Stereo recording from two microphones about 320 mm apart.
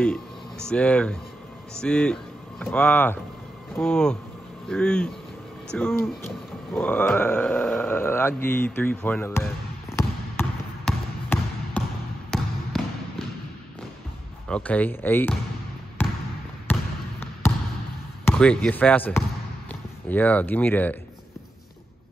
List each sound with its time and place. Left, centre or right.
0.7 s speech: centre
10.9 s basketball bounce: centre
12.3 s trickle: centre
14.5 s speech: centre
16.0 s trickle: centre
16.7 s basketball bounce: centre
18.2 s speech: centre